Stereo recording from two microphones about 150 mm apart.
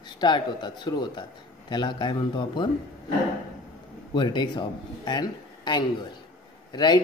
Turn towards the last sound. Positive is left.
turn(degrees=30)  # may be behind; listen again after turning